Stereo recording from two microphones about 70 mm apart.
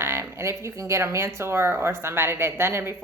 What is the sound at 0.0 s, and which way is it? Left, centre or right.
Speech, right.